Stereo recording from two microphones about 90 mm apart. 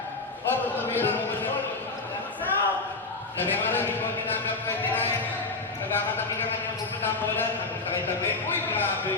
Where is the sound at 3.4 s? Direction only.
20° left (ahead or behind).